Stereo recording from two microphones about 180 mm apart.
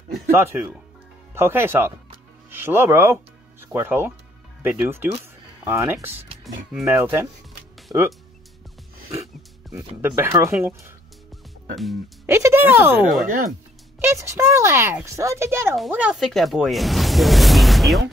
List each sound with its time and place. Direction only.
0.3 s speech: 10° right (ahead or behind)
9.8 s speech: 15° right (ahead or behind)
11.7 s speech: centre (ahead or behind)
12.3 s speech: 15° right (ahead or behind)